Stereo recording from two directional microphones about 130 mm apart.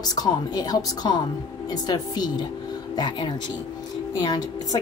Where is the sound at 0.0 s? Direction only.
30° left (ahead or behind).